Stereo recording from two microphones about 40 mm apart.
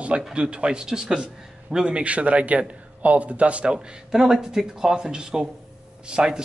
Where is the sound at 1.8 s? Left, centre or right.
Right.